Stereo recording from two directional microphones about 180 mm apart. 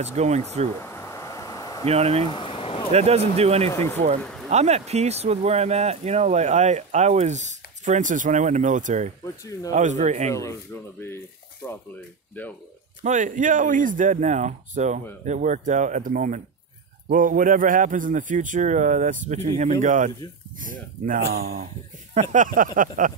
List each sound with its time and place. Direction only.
0.0 s speech: 40° right (ahead or behind)
0.7 s a sound: 15° left (ahead or behind)
1.9 s speech: 35° right (ahead or behind)
2.2 s a sound: 30° left (ahead or behind)
2.9 s speech: 35° right (ahead or behind)
4.2 s a sound: 5° left (ahead or behind)
4.5 s speech: 40° right (ahead or behind)
9.2 s speech: 20° left (ahead or behind)
9.7 s speech: 40° right (ahead or behind)
10.3 s speech: 15° left (ahead or behind)
13.0 s a man's voice: 45° right (ahead or behind); by 21.6 s 60° right (ahead or behind)
22.1 s a man's voice: 40° right (ahead or behind)